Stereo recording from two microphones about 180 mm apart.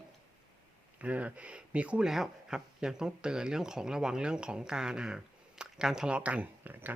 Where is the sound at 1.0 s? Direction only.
5° right (ahead or behind).